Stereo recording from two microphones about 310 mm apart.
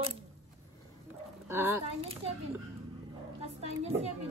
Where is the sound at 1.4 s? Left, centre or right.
Centre.